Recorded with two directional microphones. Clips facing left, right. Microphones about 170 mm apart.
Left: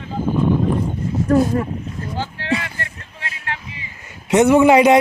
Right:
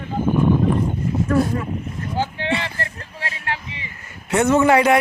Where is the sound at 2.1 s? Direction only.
25° right (ahead or behind).